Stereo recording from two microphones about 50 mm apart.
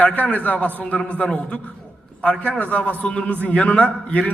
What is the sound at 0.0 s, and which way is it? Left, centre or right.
A man's voice, left.